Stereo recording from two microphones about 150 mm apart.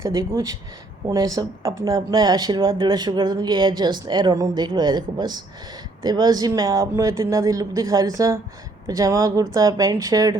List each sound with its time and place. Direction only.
0.0 s speech: 20° right (ahead or behind)